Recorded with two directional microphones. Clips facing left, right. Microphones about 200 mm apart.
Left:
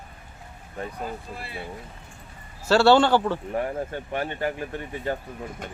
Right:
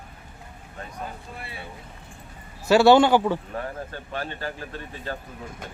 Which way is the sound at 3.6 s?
20° left (ahead or behind).